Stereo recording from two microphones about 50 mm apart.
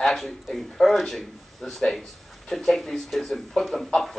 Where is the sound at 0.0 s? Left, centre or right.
Centre.